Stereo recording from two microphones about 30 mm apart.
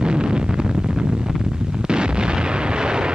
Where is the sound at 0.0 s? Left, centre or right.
Right.